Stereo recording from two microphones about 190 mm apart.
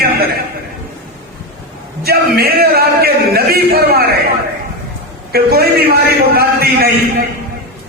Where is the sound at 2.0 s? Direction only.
55° right (ahead or behind).